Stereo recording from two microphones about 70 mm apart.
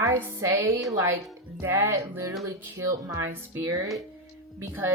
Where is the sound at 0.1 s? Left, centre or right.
Right.